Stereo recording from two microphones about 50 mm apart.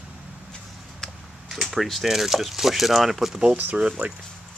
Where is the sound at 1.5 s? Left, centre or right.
Centre.